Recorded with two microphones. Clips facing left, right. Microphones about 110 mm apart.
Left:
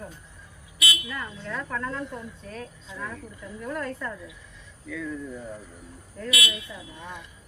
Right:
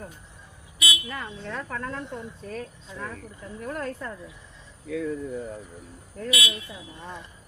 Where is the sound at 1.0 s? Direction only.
30° right (ahead or behind).